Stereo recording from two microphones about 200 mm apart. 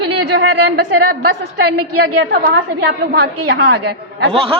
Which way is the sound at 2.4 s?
55° right (ahead or behind).